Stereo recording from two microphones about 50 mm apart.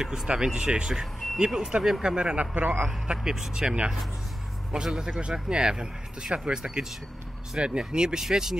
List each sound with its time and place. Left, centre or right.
0.0 s speech: centre
1.4 s speech: centre
2.5 s a man's voice: right
3.1 s speech: centre